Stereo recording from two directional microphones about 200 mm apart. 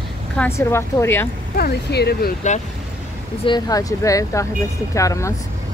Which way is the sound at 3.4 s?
20° left (ahead or behind).